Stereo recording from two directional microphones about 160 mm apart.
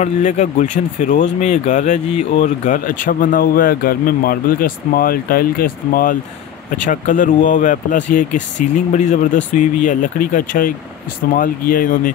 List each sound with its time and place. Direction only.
0.0 s speech: 50° left (ahead or behind)